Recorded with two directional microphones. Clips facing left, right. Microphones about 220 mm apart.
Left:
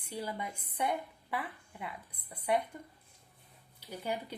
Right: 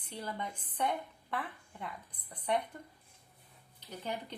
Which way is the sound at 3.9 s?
10° left (ahead or behind).